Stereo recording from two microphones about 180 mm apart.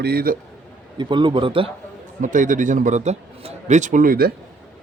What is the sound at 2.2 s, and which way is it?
A man's voice, 45° right (ahead or behind).